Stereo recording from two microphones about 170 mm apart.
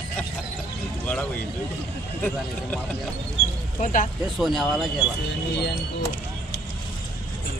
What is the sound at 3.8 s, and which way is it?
Speech, 50° left (ahead or behind).